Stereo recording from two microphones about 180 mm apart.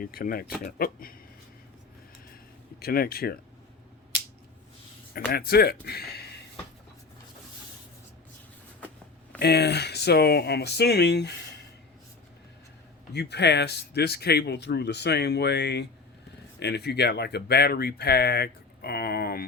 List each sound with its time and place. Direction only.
0.0 s speech: 55° left (ahead or behind)
2.8 s speech: 60° left (ahead or behind)
5.3 s speech: 60° left (ahead or behind)
9.4 s speech: 65° left (ahead or behind)
13.1 s speech: 70° left (ahead or behind)